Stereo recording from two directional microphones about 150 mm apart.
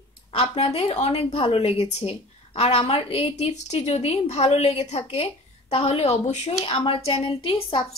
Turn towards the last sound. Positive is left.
turn(degrees=35)  # may be behind; listen again after turning